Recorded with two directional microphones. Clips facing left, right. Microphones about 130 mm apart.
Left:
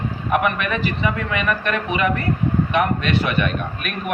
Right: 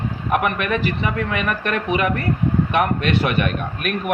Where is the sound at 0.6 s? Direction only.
50° right (ahead or behind).